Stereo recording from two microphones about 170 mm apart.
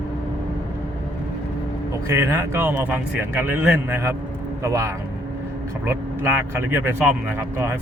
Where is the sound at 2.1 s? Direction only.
15° right (ahead or behind).